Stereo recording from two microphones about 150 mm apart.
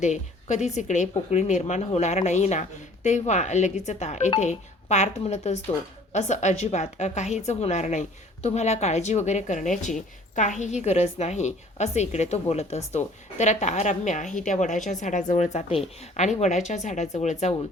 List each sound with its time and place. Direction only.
0.0 s a woman's voice: 50° left (ahead or behind)